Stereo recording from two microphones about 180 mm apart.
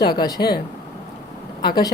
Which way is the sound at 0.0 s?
25° left (ahead or behind).